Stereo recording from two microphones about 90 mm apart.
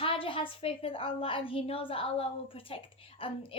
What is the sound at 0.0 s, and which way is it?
A woman's voice, 85° left.